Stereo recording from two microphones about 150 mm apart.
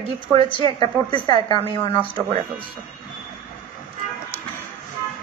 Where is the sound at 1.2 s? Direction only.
30° left (ahead or behind).